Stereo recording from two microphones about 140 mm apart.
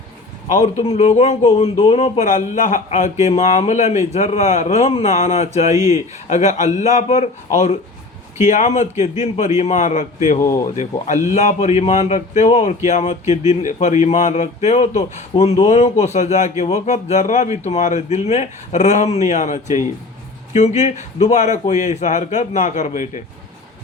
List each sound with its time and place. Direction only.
0.5 s a man's voice: 50° left (ahead or behind)